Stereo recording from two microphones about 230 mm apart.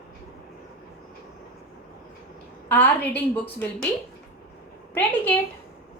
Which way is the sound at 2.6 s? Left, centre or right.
Centre.